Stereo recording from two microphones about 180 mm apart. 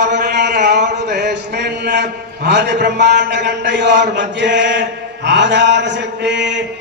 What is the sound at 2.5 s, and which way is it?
A man's voice, 70° right (ahead or behind).